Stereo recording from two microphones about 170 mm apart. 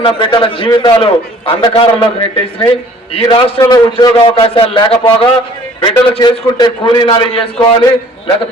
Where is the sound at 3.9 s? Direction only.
30° left (ahead or behind).